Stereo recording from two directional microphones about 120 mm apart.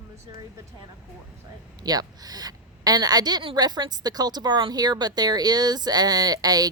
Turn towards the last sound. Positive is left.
turn(degrees=-30)  # may be behind; listen again after turning